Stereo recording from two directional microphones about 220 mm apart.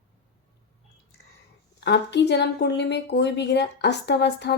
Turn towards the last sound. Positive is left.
turn(degrees=50)  # may be behind; listen again after turning